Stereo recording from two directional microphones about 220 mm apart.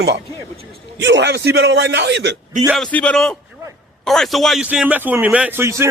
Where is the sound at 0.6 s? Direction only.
55° right (ahead or behind).